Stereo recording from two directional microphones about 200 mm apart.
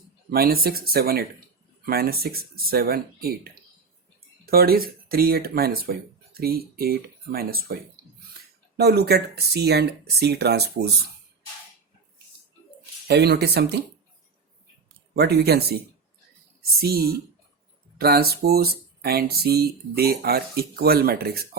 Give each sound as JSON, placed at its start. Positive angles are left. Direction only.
{"t": 0.3, "sound": "speech", "side_deg": -50}
{"t": 8.8, "sound": "speech", "side_deg": -50}
{"t": 13.1, "sound": "speech", "side_deg": -55}
{"t": 15.1, "sound": "speech", "side_deg": -55}